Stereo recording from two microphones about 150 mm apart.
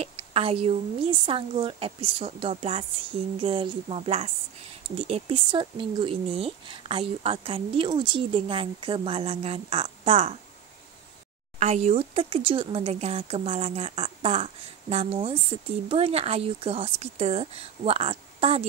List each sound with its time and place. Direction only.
0.0 s speech: 40° right (ahead or behind)
11.6 s speech: 50° right (ahead or behind)